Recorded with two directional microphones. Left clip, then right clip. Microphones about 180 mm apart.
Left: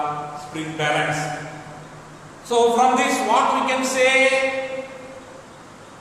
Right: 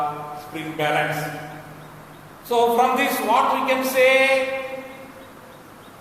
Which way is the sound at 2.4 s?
20° right (ahead or behind).